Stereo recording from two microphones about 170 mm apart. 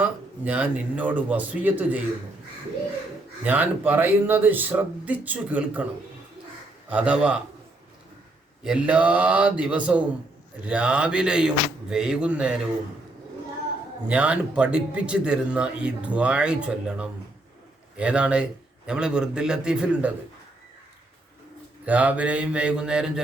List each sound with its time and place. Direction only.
0.0 s a man's voice: 10° right (ahead or behind)
3.4 s speech: 10° right (ahead or behind)
6.9 s speech: 5° right (ahead or behind)
8.6 s speech: 5° right (ahead or behind)
14.1 s speech: 5° right (ahead or behind)
21.8 s speech: 10° right (ahead or behind)